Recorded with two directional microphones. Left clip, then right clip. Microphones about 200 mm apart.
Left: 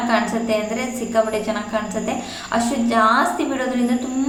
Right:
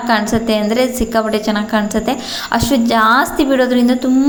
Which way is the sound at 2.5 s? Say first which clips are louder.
Right 4 dB; 45° right (ahead or behind).